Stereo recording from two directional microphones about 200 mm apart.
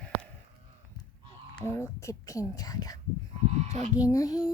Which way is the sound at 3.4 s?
35° right (ahead or behind).